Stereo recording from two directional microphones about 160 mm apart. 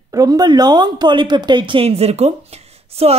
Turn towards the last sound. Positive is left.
turn(degrees=-40)  # may be behind; listen again after turning